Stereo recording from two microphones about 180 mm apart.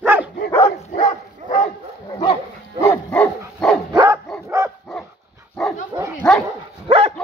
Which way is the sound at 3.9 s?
25° right (ahead or behind).